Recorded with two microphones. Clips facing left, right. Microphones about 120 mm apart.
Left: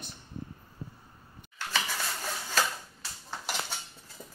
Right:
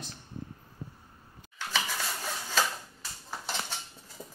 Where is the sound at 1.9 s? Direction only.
Centre (ahead or behind).